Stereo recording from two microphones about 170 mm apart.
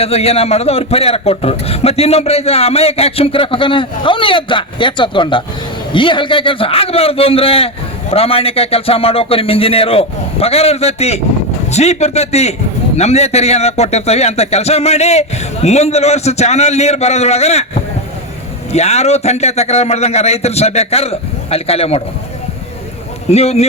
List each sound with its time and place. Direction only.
0.0 s a man's voice: 35° left (ahead or behind)
18.7 s a man's voice: 40° left (ahead or behind)
23.3 s a man's voice: 40° left (ahead or behind)